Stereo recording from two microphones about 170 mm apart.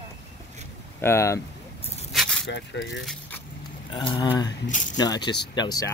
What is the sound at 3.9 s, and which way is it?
Speech, 30° left (ahead or behind).